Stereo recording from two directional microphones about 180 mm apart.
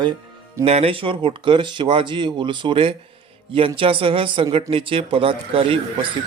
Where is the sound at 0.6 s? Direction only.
35° right (ahead or behind).